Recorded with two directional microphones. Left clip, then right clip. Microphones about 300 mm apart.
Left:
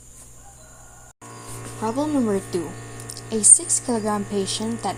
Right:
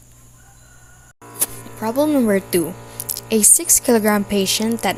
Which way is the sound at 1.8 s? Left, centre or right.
Right.